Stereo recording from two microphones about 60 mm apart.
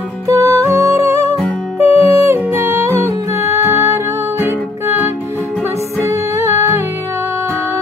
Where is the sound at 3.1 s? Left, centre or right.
Right.